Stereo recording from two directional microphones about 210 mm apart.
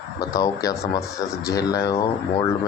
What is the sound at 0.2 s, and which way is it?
Speech, 15° left (ahead or behind).